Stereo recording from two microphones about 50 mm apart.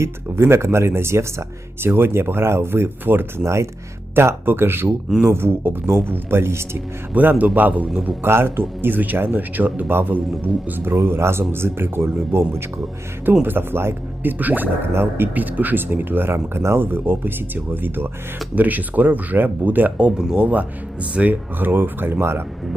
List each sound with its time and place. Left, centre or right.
0.0 s speech: right
3.4 s speech: right
4.1 s speech: right
7.1 s speech: right
8.2 s speech: right
10.9 s speech: right
13.4 s speech: right
18.5 s speech: right
20.0 s speech: right